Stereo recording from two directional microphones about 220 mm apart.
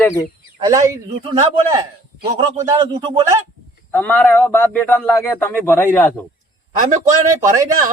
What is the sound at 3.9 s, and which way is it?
Speech, 10° left (ahead or behind).